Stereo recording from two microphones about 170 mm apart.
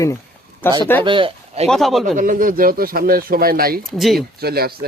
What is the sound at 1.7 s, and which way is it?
Speech, centre (ahead or behind).